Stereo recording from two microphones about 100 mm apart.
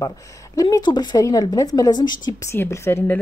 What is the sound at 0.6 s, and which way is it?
Speech, 35° left (ahead or behind).